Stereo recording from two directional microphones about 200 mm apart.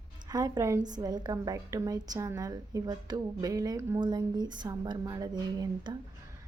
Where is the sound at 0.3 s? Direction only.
20° right (ahead or behind).